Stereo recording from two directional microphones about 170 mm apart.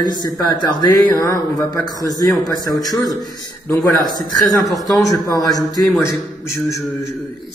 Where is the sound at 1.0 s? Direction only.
15° left (ahead or behind).